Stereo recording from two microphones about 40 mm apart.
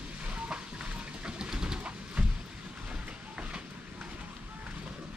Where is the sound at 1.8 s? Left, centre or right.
Right.